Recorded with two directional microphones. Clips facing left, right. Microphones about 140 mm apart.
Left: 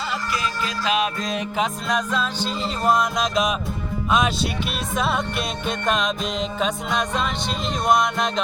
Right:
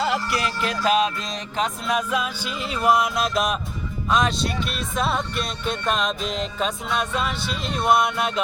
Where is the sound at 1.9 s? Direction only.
10° right (ahead or behind).